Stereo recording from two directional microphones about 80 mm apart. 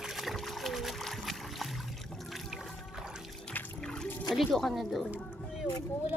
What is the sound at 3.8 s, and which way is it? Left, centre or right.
Music, centre.